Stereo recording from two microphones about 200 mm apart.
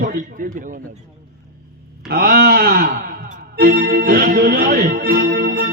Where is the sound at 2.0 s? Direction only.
50° right (ahead or behind).